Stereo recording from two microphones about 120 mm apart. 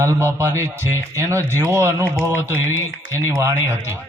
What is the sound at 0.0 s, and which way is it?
A man's voice, 25° right (ahead or behind).